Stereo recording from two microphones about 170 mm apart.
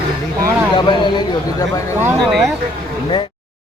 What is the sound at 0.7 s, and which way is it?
A man's voice, 30° left (ahead or behind).